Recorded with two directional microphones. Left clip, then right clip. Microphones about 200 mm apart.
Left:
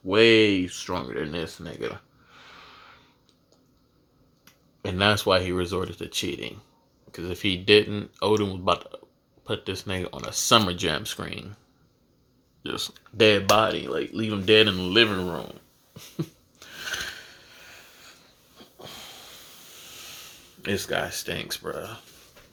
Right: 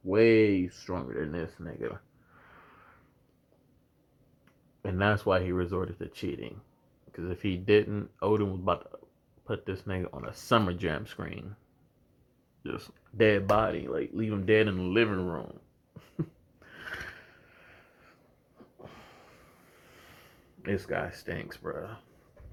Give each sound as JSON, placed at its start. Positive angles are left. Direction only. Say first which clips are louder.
{"t": 0.1, "sound": "speech", "louder": "left 5 dB", "side_deg": 35}
{"t": 2.4, "sound": "a sound", "louder": "left 8 dB", "side_deg": 45}
{"t": 4.8, "sound": "speech", "louder": "left 6 dB", "side_deg": 50}
{"t": 12.6, "sound": "speech", "louder": "left 8 dB", "side_deg": 55}
{"t": 16.0, "sound": "a sound", "louder": "left 4 dB", "side_deg": 55}
{"t": 20.8, "sound": "speech", "louder": "left 6 dB", "side_deg": 50}